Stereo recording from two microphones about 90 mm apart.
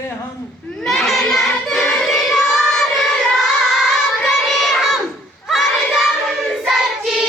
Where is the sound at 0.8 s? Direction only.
5° left (ahead or behind).